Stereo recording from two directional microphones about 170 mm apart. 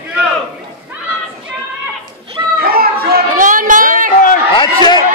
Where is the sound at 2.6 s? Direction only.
60° right (ahead or behind).